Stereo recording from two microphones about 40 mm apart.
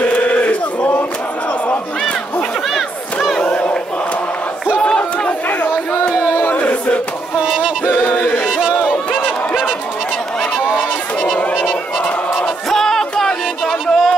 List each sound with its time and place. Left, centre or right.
0.1 s choir: left
3.3 s battle cry: left
4.8 s crowd: left
6.5 s battle cry: left
7.3 s a sound: centre
8.5 s crowd: centre
10.7 s a sound: centre
12.6 s a sound: centre
13.7 s music: centre